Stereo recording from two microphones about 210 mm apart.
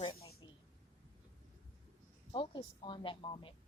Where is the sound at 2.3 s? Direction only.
25° left (ahead or behind).